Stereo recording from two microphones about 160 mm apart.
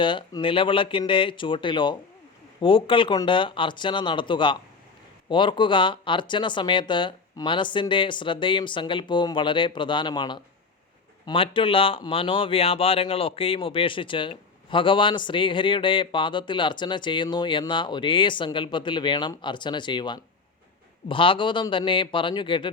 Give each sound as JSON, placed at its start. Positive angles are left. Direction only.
{"t": 0.0, "sound": "speech", "side_deg": 30}